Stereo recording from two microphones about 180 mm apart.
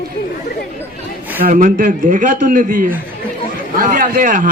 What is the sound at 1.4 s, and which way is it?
A man's voice, 50° right (ahead or behind).